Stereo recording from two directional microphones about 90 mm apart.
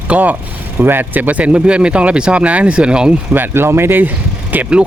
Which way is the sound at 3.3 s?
25° right (ahead or behind).